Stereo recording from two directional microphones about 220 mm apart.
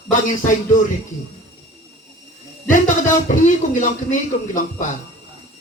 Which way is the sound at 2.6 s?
35° left (ahead or behind).